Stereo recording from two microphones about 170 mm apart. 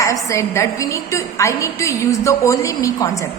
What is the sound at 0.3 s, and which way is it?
A woman's voice, 15° left (ahead or behind).